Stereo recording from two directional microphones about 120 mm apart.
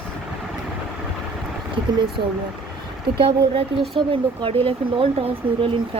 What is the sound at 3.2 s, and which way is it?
Speech, 45° right (ahead or behind).